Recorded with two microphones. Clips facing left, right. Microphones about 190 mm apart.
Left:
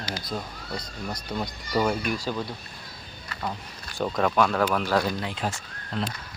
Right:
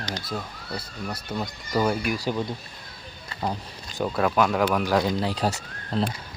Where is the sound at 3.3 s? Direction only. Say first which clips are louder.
Right 4 dB; 30° right (ahead or behind).